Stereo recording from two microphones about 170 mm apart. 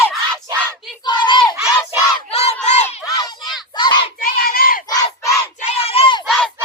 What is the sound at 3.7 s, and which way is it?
Child singing, 25° left (ahead or behind).